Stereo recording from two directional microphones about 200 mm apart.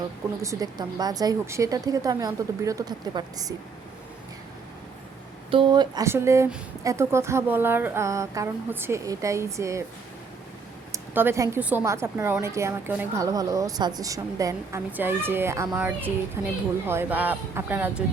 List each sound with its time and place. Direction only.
0.4 s speech: 20° right (ahead or behind)
5.5 s speech: 25° right (ahead or behind)
10.9 s speech: 10° right (ahead or behind)